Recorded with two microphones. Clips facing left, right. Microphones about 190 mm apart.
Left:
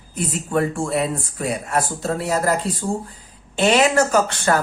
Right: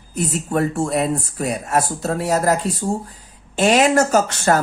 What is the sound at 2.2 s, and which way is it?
Speech, 40° right (ahead or behind).